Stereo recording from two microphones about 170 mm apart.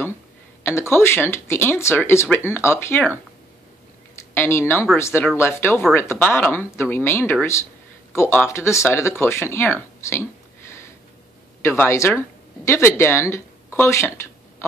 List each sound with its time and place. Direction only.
0.7 s speech: 15° left (ahead or behind)
4.1 s a sound: 15° left (ahead or behind)
4.9 s speech: 15° left (ahead or behind)
11.6 s speech: 15° left (ahead or behind)